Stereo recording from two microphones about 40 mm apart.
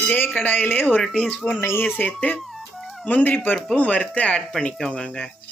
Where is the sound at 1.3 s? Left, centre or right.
Centre.